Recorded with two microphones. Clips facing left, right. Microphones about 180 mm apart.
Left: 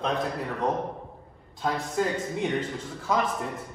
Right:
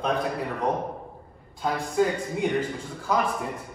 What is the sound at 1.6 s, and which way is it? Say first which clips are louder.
A man's voice: right 3 dB; centre (ahead or behind).